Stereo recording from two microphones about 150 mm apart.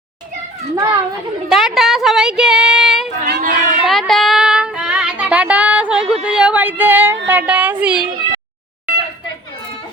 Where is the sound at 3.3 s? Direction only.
65° right (ahead or behind).